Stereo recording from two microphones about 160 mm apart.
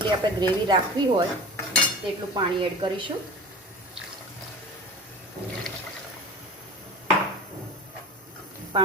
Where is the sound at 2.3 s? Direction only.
30° right (ahead or behind).